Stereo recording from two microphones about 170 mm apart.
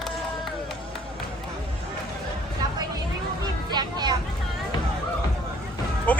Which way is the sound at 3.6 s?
25° right (ahead or behind).